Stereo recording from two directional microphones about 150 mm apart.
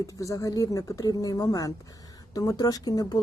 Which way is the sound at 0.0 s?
20° left (ahead or behind).